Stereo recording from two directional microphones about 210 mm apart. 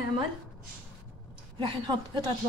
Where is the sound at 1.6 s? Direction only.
20° right (ahead or behind).